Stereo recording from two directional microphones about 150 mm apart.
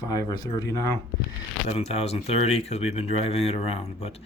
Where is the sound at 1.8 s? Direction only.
45° left (ahead or behind).